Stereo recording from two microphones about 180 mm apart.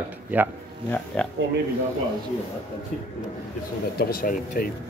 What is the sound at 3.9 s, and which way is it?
Speech, 55° left (ahead or behind).